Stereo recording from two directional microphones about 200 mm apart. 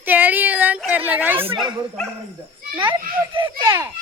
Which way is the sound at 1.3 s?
25° right (ahead or behind).